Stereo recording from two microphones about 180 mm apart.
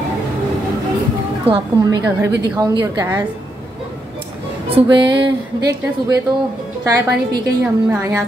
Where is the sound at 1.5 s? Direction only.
20° right (ahead or behind).